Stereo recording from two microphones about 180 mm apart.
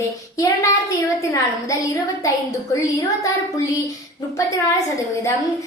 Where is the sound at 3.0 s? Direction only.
20° left (ahead or behind).